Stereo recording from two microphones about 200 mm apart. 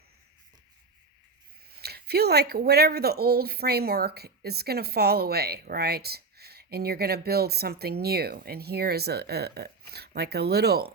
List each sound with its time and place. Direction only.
1.8 s speech: 55° right (ahead or behind)